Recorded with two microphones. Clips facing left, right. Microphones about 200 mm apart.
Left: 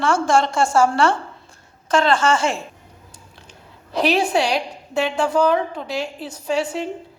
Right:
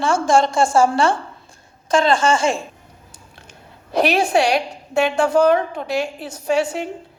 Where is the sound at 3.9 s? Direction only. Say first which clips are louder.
Right 2 dB; 50° right (ahead or behind).